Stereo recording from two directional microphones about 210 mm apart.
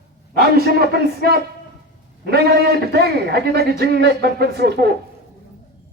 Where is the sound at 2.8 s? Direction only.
50° right (ahead or behind).